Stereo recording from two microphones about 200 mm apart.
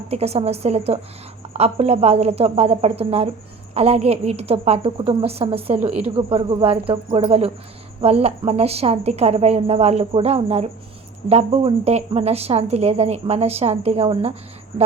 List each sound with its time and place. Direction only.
0.1 s a woman's voice: 30° right (ahead or behind)